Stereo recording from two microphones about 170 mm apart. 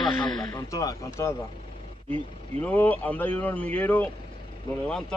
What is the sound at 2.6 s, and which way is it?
Speech, 10° left (ahead or behind).